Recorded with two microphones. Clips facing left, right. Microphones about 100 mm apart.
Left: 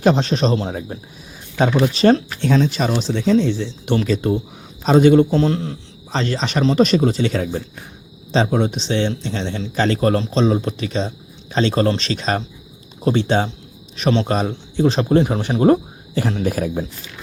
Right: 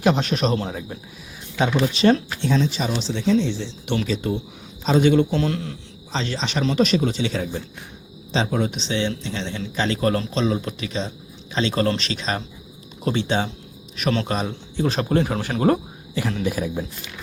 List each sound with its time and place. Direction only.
0.0 s a man's voice: 30° left (ahead or behind)
2.4 s a man's voice: 55° left (ahead or behind); by 5.7 s 35° left (ahead or behind)
6.1 s speech: 50° left (ahead or behind)
8.3 s a man's voice: 35° left (ahead or behind)
16.1 s speech: 40° left (ahead or behind)